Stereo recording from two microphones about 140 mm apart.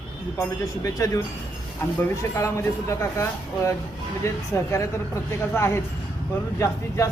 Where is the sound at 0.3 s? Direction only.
25° left (ahead or behind).